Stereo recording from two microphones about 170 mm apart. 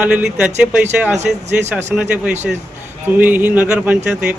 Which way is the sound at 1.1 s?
40° right (ahead or behind).